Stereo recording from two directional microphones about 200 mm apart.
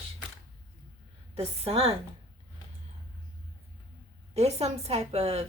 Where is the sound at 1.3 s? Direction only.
30° right (ahead or behind).